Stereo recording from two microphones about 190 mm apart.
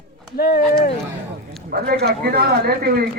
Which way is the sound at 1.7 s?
55° right (ahead or behind).